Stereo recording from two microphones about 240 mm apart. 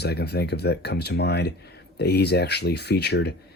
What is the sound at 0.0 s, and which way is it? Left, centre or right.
Speech, left.